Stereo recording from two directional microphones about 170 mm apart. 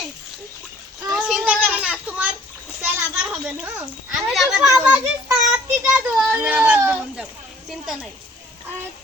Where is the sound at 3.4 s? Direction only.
10° right (ahead or behind).